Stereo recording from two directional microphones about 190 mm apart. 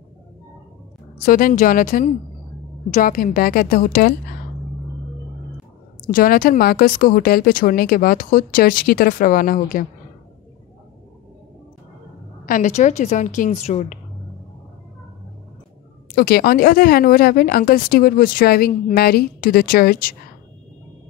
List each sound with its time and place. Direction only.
1.2 s speech: 45° left (ahead or behind)
6.1 s speech: 50° left (ahead or behind)
12.4 s a woman's voice: 45° left (ahead or behind)
16.2 s speech: 55° left (ahead or behind)